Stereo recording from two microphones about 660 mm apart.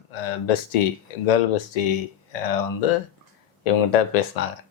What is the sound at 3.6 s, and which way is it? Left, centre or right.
Speech, left.